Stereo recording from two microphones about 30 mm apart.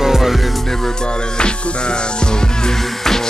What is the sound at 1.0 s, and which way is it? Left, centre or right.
Music, left.